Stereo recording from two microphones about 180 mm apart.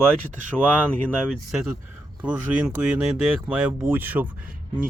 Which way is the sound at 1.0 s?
5° right (ahead or behind).